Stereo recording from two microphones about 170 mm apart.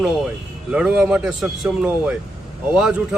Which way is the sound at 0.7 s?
5° right (ahead or behind).